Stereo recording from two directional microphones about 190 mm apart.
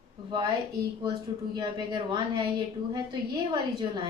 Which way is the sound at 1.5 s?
25° right (ahead or behind).